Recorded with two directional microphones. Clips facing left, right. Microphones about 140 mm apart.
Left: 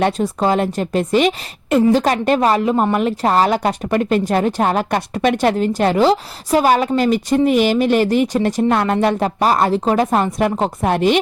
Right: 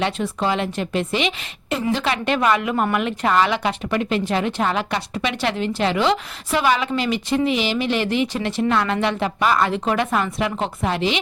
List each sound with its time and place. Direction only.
0.0 s a woman's voice: 40° left (ahead or behind)